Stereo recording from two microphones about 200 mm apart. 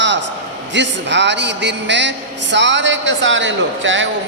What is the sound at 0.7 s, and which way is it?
A man's voice, 60° right (ahead or behind).